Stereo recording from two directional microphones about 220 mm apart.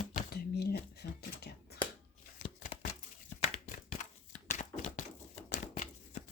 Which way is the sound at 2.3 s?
30° left (ahead or behind).